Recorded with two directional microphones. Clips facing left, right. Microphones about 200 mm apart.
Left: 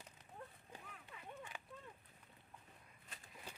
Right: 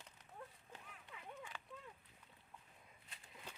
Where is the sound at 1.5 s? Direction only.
15° left (ahead or behind).